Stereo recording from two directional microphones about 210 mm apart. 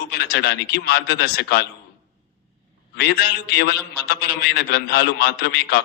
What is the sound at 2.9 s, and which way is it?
A man's voice, 50° left (ahead or behind).